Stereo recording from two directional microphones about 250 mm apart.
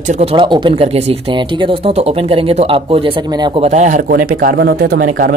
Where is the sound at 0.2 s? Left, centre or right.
Right.